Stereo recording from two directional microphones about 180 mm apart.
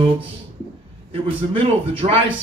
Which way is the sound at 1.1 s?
30° right (ahead or behind).